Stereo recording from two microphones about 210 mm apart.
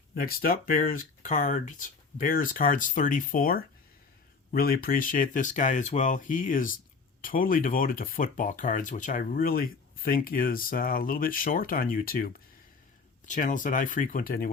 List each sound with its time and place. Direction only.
0.1 s speech: 45° left (ahead or behind)